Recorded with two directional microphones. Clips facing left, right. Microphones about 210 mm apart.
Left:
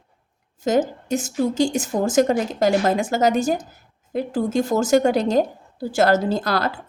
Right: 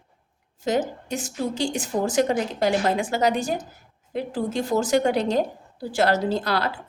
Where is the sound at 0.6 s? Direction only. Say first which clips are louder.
Left 4 dB; 45° left (ahead or behind).